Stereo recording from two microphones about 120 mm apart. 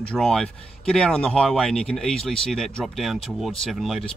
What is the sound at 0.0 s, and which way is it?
Speech, 5° left (ahead or behind).